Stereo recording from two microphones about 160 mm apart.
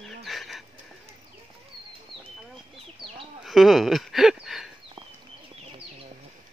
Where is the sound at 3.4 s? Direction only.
Centre (ahead or behind).